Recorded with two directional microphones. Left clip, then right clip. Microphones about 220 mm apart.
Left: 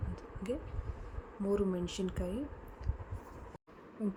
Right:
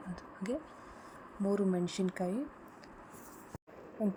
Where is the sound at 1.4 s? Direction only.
10° right (ahead or behind).